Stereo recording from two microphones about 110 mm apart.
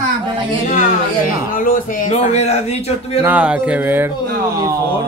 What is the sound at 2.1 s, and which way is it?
A man's voice, 80° left.